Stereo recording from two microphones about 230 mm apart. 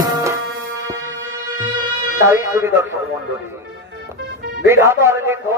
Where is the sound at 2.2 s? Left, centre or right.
Centre.